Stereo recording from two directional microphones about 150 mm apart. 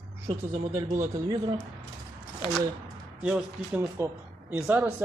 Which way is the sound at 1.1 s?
25° right (ahead or behind).